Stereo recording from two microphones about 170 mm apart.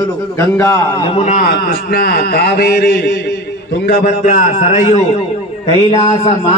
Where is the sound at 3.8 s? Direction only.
55° left (ahead or behind).